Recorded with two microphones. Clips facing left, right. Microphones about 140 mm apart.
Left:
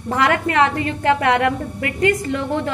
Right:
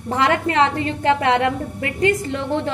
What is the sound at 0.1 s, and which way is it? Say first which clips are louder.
A woman's voice: left 1 dB; 25° right (ahead or behind).